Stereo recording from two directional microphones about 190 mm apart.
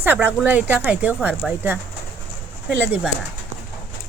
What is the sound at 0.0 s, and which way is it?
Speech, 10° right (ahead or behind).